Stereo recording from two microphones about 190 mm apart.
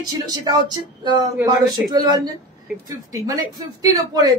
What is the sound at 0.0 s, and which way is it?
A man's voice, 20° right (ahead or behind).